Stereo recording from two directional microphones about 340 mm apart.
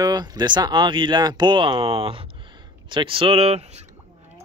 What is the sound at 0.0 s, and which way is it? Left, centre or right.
Speech, centre.